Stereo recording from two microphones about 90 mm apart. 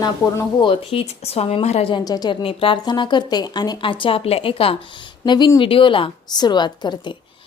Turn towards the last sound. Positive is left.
turn(degrees=55)  # may be behind; listen again after turning